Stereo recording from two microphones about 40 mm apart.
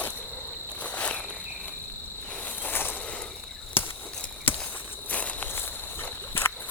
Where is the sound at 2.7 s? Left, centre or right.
Left.